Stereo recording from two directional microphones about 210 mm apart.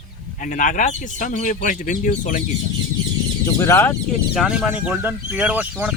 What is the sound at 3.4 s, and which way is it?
Speech, 15° left (ahead or behind).